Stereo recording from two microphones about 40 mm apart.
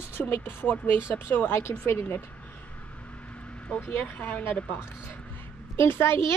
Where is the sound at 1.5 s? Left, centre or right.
Left.